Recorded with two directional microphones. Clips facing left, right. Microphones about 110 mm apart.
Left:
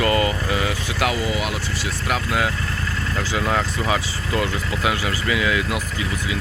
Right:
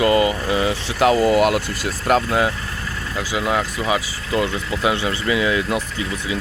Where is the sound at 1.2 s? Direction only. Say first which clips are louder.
Right 9 dB; 50° right (ahead or behind).